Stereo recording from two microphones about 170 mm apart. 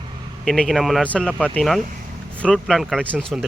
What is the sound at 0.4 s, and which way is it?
Speech, 5° left (ahead or behind).